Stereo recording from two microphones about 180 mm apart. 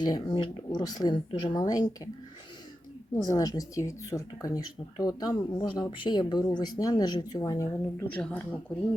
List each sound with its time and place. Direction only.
0.0 s speech: 25° left (ahead or behind)
3.2 s speech: 20° left (ahead or behind)